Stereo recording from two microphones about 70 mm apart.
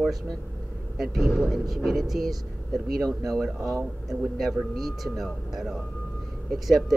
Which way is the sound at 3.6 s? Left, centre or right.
Right.